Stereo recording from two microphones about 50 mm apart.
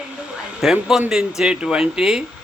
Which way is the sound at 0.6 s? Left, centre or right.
Centre.